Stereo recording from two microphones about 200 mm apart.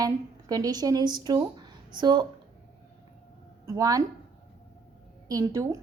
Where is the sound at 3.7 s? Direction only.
15° right (ahead or behind).